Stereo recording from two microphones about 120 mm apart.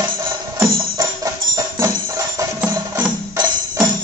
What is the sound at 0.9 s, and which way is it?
Music, 30° right (ahead or behind).